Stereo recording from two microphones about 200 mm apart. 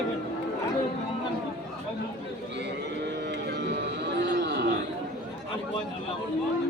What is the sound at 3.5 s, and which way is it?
Music, 60° right (ahead or behind).